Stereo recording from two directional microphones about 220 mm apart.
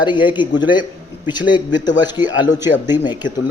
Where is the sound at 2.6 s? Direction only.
10° right (ahead or behind).